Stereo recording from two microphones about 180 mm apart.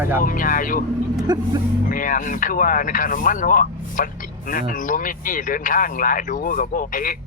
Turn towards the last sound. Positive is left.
turn(degrees=50)  # may be behind; listen again after turning